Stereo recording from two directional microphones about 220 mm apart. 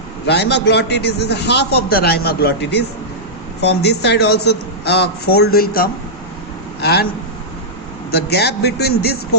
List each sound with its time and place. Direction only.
0.3 s a man's voice: 50° left (ahead or behind)
8.1 s a man's voice: 45° left (ahead or behind)